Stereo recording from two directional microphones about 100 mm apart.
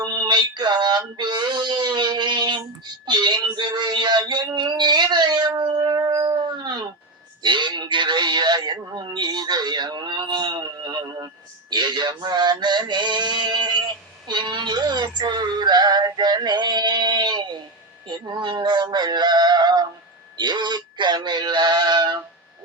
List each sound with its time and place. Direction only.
0.0 s a sound: 45° right (ahead or behind)
11.7 s male singing: 45° right (ahead or behind)
18.1 s synthetic singing: 50° right (ahead or behind)